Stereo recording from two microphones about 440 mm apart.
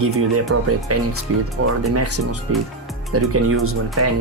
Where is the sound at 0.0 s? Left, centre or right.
Right.